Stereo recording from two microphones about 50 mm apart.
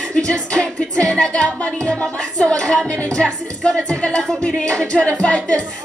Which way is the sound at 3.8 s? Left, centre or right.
Centre.